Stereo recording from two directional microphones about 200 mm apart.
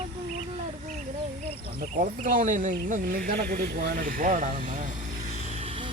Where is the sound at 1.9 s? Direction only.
45° right (ahead or behind).